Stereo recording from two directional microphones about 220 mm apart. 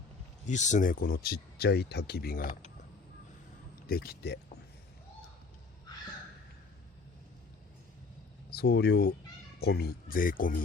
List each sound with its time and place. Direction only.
0.4 s speech: 35° left (ahead or behind)
3.8 s speech: 45° left (ahead or behind)
8.4 s speech: 45° left (ahead or behind)